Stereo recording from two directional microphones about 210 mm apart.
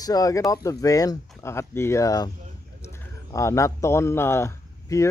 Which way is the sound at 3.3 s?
15° left (ahead or behind).